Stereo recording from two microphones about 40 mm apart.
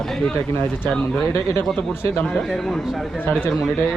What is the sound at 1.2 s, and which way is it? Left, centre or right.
Speech, left.